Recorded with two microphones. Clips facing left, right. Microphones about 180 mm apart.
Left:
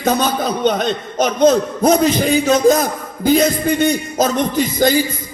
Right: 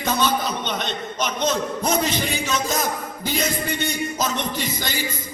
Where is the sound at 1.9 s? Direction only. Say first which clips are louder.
Left 11 dB; 45° left (ahead or behind).